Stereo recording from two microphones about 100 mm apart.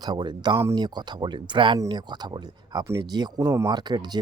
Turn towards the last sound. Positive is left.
turn(degrees=-45)  # may be behind; listen again after turning